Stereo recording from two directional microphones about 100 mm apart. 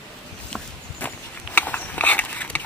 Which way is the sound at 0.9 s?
20° left (ahead or behind).